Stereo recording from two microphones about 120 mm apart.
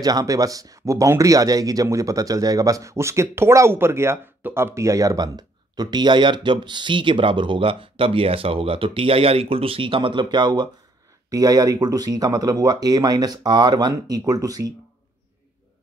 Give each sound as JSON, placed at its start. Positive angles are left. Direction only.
{"t": 0.0, "sound": "speech", "side_deg": -30}